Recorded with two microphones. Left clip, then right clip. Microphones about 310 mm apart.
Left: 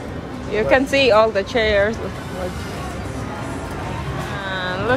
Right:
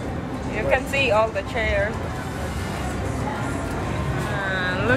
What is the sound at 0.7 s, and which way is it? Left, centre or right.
Speech, left.